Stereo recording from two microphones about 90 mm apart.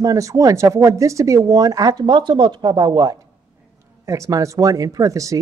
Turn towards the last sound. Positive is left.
turn(degrees=-40)  # may be behind; listen again after turning